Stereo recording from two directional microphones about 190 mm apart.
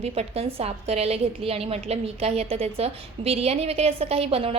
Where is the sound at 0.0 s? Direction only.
30° right (ahead or behind).